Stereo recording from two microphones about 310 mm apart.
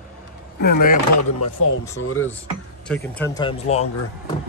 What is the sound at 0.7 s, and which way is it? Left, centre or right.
Speech, left.